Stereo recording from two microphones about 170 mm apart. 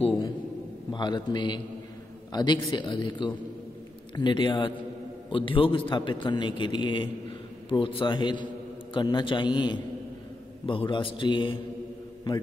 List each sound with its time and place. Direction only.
0.9 s a man's voice: 25° left (ahead or behind)